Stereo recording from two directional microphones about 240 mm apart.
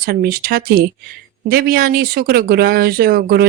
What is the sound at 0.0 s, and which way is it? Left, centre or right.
A woman's voice, right.